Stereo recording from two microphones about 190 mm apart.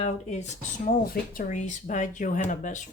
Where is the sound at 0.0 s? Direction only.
35° left (ahead or behind).